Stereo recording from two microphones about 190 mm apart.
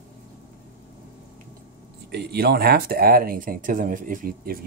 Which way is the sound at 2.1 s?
60° right (ahead or behind).